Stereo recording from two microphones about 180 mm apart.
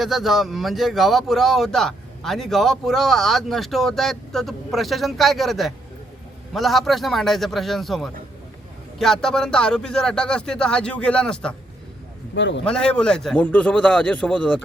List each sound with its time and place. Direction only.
0.0 s a man's voice: centre (ahead or behind)
12.3 s a man's voice: 80° left
12.6 s a man's voice: 5° left (ahead or behind)